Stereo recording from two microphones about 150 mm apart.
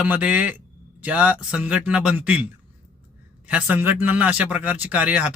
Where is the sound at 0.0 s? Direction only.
10° right (ahead or behind).